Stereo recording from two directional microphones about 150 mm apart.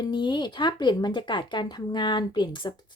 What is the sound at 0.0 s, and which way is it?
Speech, 30° left (ahead or behind).